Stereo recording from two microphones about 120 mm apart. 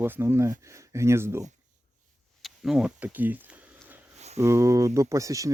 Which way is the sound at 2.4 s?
5° right (ahead or behind).